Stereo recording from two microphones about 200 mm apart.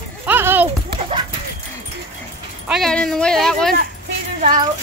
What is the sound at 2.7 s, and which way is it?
Speech, centre (ahead or behind).